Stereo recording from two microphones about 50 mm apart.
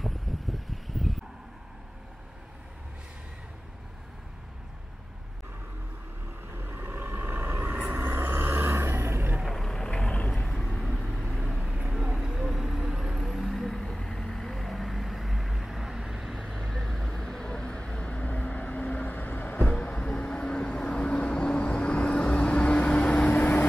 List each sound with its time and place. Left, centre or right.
0.0 s a sound: centre
6.9 s vehicle: right
9.4 s vehicle: centre
11.9 s vehicle: centre
16.3 s vehicle: centre; by 19.7 s left
19.7 s vehicle: left